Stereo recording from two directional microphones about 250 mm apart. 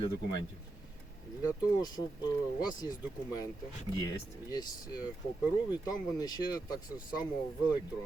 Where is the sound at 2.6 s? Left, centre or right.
Centre.